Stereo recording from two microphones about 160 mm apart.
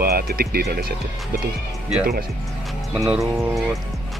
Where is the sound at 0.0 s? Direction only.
75° right (ahead or behind).